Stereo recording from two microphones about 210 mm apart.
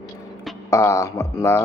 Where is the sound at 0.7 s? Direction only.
15° left (ahead or behind).